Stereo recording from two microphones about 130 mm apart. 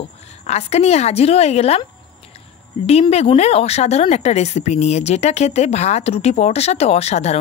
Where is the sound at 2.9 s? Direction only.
55° left (ahead or behind).